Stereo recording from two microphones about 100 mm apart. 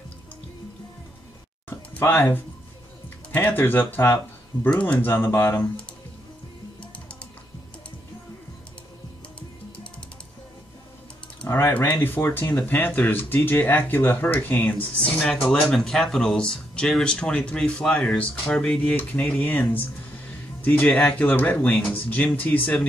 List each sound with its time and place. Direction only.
1.7 s a sound: 20° left (ahead or behind)
3.3 s speech: 20° left (ahead or behind)
5.0 s speech: 25° left (ahead or behind)
11.4 s speech: 30° left (ahead or behind)
15.2 s speech: 10° left (ahead or behind)